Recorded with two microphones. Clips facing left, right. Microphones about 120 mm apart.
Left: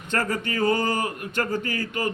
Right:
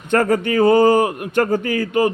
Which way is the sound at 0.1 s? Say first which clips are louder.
Right 10 dB; 50° right (ahead or behind).